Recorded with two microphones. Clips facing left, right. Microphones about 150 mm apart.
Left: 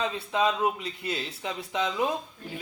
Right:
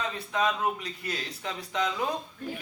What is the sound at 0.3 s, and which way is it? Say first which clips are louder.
Speech: left 2 dB; 20° left (ahead or behind).